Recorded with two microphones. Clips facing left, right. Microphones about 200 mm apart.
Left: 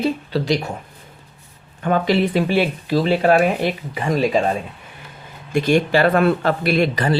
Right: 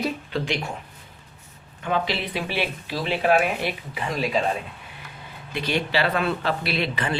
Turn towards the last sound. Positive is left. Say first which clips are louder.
# left 8 dB
turn(degrees=45)  # may be behind; listen again after turning